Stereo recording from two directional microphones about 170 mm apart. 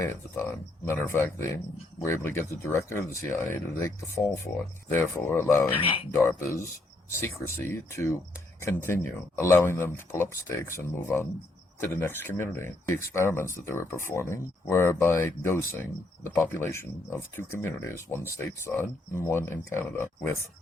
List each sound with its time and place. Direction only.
0.0 s speech: 15° left (ahead or behind)
5.7 s speech: 30° left (ahead or behind)
6.2 s speech: 15° left (ahead or behind)